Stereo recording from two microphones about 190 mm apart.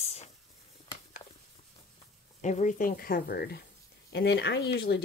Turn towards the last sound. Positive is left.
turn(degrees=55)  # may be behind; listen again after turning